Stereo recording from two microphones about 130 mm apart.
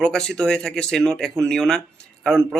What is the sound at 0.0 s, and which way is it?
Speech, 5° left (ahead or behind).